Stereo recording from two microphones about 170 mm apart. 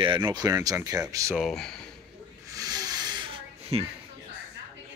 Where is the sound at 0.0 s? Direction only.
25° right (ahead or behind).